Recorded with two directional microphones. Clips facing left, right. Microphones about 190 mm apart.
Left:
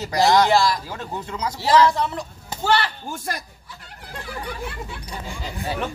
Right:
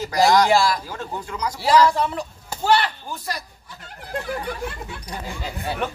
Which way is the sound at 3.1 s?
50° left (ahead or behind).